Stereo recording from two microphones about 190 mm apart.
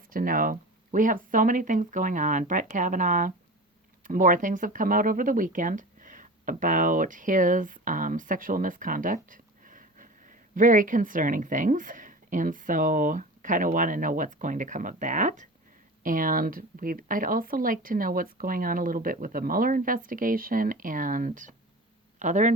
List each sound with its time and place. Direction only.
0.1 s speech: 45° right (ahead or behind)